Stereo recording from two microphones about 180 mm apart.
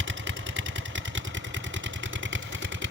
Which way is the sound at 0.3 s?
90° right.